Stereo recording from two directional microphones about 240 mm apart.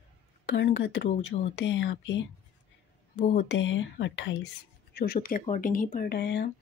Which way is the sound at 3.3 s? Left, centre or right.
Left.